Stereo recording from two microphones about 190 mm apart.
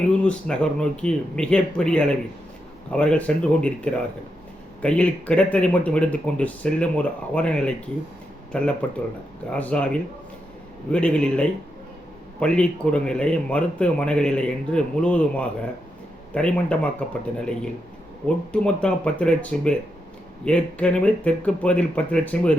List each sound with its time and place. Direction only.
0.2 s a man's voice: 5° left (ahead or behind)